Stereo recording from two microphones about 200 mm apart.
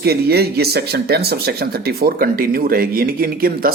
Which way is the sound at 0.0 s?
55° right (ahead or behind).